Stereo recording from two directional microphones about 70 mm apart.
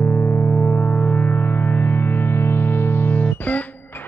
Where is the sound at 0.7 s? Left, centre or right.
Centre.